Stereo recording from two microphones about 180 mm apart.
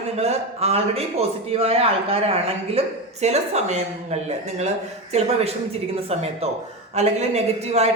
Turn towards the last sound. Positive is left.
turn(degrees=-35)  # may be behind; listen again after turning